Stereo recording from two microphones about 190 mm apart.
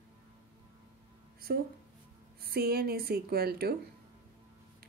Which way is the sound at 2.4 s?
55° right (ahead or behind).